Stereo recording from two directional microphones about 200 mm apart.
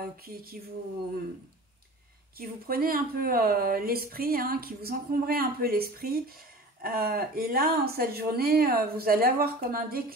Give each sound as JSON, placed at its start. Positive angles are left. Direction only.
{"t": 0.2, "sound": "speech", "side_deg": -50}
{"t": 2.3, "sound": "speech", "side_deg": -50}